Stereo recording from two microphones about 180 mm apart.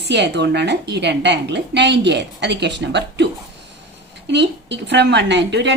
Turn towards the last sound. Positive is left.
turn(degrees=-75)  # may be behind; listen again after turning